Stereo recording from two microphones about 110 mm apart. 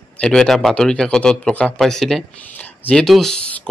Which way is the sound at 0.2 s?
5° left (ahead or behind).